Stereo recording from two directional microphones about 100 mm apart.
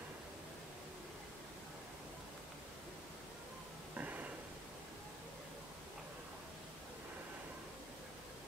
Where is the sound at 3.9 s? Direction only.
15° right (ahead or behind).